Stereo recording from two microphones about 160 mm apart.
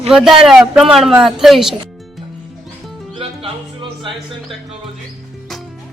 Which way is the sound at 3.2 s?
35° right (ahead or behind).